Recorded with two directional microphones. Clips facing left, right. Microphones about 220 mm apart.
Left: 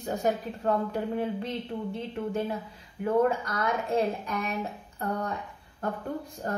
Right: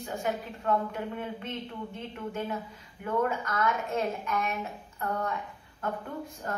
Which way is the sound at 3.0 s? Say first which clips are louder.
Left 5 dB; 35° left (ahead or behind).